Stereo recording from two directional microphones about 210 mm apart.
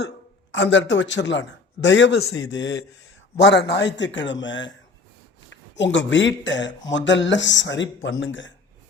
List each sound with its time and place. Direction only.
0.5 s speech: 55° left (ahead or behind)